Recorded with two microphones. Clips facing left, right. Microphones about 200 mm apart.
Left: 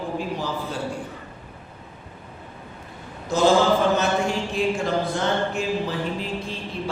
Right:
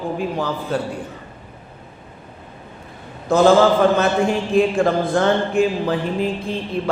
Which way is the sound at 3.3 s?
55° right (ahead or behind).